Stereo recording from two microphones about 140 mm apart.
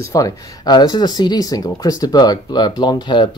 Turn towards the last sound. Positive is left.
turn(degrees=35)  # may be behind; listen again after turning